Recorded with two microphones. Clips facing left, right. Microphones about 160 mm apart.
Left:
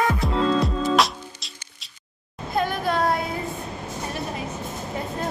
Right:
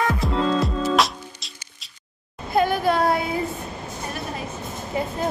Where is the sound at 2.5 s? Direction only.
5° right (ahead or behind).